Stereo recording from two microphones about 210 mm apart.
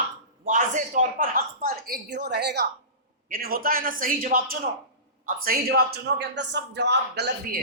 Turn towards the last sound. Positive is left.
turn(degrees=-55)  # may be behind; listen again after turning